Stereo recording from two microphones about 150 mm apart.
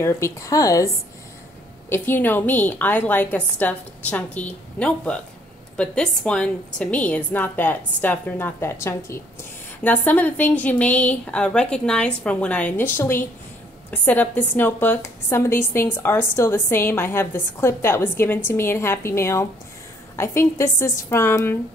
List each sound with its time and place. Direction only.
0.0 s speech: 20° left (ahead or behind)
1.9 s a woman's voice: 15° left (ahead or behind)